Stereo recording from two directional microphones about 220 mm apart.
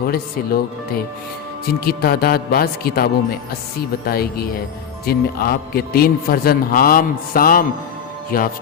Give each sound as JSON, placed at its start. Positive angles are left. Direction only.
{"t": 0.0, "sound": "a man's voice", "side_deg": 45}
{"t": 1.8, "sound": "a man's voice", "side_deg": 45}